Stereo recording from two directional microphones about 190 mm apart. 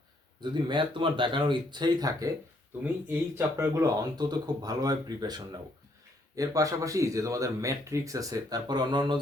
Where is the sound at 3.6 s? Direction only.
15° right (ahead or behind).